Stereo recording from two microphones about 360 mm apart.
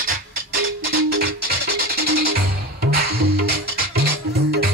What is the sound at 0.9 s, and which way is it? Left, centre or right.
Music, right.